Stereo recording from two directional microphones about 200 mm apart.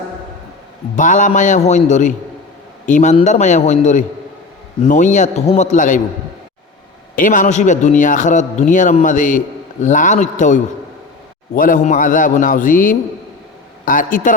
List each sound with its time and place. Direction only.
0.9 s a man's voice: 40° left (ahead or behind)
7.2 s a man's voice: 40° left (ahead or behind)